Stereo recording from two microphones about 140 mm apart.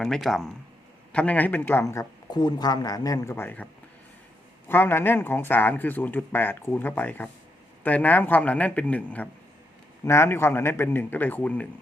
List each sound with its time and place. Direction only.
0.0 s speech: centre (ahead or behind)
4.7 s speech: 15° left (ahead or behind)